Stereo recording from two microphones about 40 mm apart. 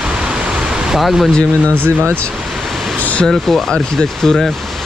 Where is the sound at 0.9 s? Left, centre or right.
Centre.